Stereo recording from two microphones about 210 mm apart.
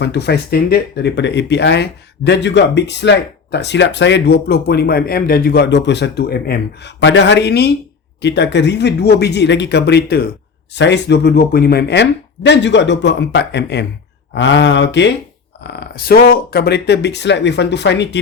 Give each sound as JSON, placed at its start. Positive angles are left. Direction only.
{"t": 0.0, "sound": "speech", "side_deg": 55}